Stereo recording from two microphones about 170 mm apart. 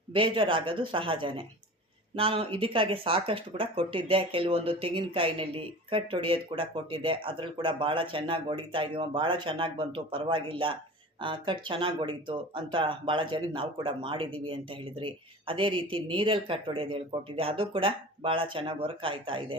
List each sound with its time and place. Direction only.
0.1 s a woman's voice: 30° right (ahead or behind)